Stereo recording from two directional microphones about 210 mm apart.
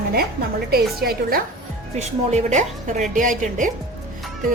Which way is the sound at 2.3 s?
35° right (ahead or behind).